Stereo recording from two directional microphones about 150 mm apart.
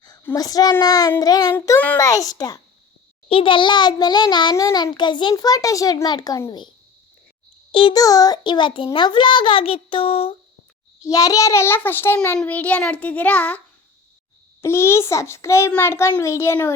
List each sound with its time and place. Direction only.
0.3 s a child's voice: 25° left (ahead or behind)
3.2 s a child's voice: 35° left (ahead or behind)
7.7 s a child's voice: 35° left (ahead or behind)
11.0 s a child's voice: 20° left (ahead or behind)
14.6 s a child's voice: 15° left (ahead or behind)